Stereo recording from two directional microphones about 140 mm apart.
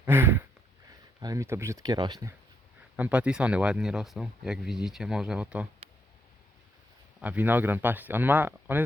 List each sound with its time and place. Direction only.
0.0 s a sound: 15° right (ahead or behind)
1.2 s speech: 25° right (ahead or behind)
2.9 s speech: 10° right (ahead or behind)
7.2 s speech: 10° right (ahead or behind)